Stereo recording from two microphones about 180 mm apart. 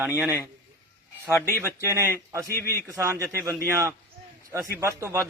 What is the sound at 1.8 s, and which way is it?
Speech, 15° right (ahead or behind).